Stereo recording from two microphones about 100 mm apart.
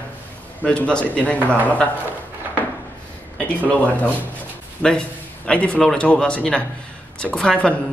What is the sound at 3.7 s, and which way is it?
A man's voice, 15° left (ahead or behind).